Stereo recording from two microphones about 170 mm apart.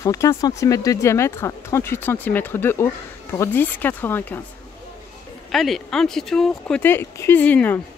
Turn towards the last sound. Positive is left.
turn(degrees=10)  # may be behind; listen again after turning